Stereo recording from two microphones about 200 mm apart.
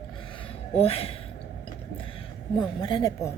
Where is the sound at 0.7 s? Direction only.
30° left (ahead or behind).